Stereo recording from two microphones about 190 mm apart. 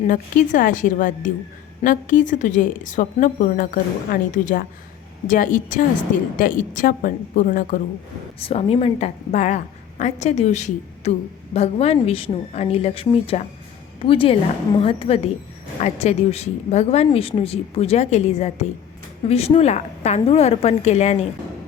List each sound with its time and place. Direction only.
0.0 s speech: 40° left (ahead or behind)
8.4 s a woman's voice: 30° left (ahead or behind)